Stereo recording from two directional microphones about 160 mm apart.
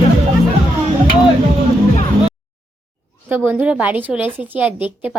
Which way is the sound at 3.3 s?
10° right (ahead or behind).